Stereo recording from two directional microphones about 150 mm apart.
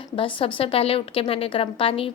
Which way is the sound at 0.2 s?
35° left (ahead or behind).